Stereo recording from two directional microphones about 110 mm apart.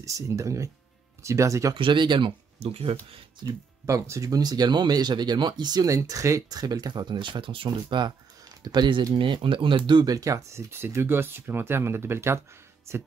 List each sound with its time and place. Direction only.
0.0 s speech: 30° right (ahead or behind)
1.8 s speech: 45° right (ahead or behind)
3.4 s speech: 35° right (ahead or behind)